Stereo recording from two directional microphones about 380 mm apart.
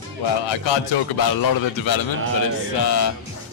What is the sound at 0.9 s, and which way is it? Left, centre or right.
A man's voice, left.